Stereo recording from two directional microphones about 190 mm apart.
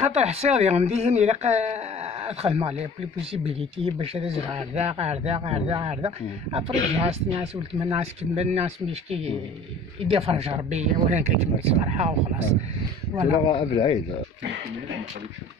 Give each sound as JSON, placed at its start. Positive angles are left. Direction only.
{"t": 0.0, "sound": "speech", "side_deg": -35}
{"t": 13.5, "sound": "speech", "side_deg": 25}